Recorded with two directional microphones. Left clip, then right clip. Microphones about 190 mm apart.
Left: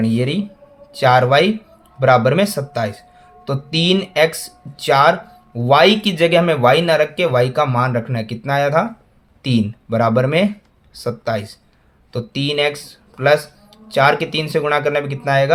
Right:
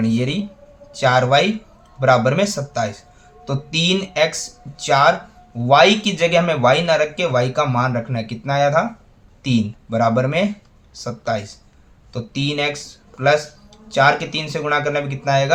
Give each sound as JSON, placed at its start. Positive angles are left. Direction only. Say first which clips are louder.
{"t": 0.0, "sound": "speech", "louder": "left 2 dB", "side_deg": 35}